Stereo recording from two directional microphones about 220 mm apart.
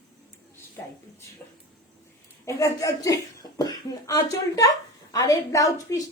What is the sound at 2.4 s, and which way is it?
A woman's voice, 15° left (ahead or behind).